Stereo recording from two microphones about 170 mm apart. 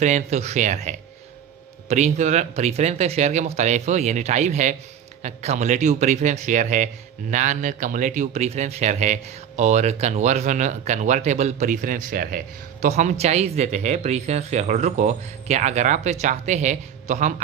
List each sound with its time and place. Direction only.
0.0 s a man's voice: 40° right (ahead or behind)
12.8 s a man's voice: 45° right (ahead or behind)